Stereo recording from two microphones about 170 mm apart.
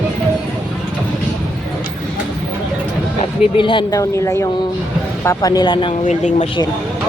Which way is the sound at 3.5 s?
30° left (ahead or behind).